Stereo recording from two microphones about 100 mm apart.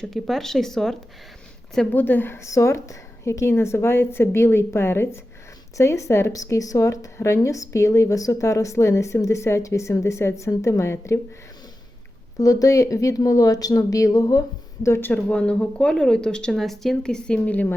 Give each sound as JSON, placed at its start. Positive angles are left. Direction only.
{"t": 0.0, "sound": "speech", "side_deg": 0}
{"t": 1.9, "sound": "a woman's voice", "side_deg": 20}
{"t": 12.4, "sound": "speech", "side_deg": 35}
{"t": 14.8, "sound": "a woman's voice", "side_deg": 25}
{"t": 15.1, "sound": "speech", "side_deg": 10}